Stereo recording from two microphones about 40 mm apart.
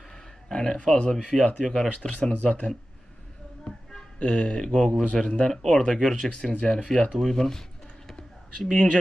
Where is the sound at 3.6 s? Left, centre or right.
Left.